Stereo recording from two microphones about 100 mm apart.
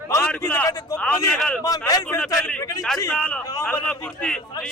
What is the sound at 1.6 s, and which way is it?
Speech, 35° left (ahead or behind).